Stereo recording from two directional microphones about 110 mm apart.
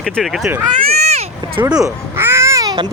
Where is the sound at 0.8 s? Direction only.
80° right.